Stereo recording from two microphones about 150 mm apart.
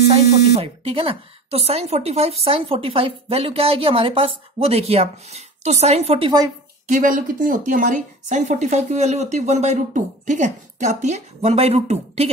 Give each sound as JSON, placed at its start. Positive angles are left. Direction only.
{"t": 0.1, "sound": "speech", "side_deg": -40}
{"t": 6.9, "sound": "speech", "side_deg": -60}